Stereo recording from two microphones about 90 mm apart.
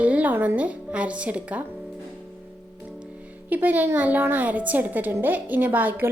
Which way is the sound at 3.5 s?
20° right (ahead or behind).